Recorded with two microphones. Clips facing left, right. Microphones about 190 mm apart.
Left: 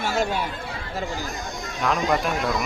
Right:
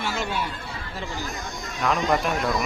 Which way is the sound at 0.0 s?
45° left (ahead or behind).